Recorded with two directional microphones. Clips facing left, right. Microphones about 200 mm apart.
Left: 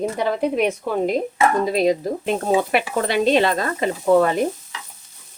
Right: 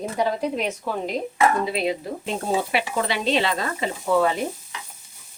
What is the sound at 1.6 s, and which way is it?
Speech, 40° left (ahead or behind).